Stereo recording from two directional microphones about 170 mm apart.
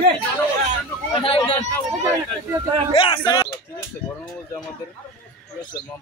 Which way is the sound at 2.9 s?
30° left (ahead or behind).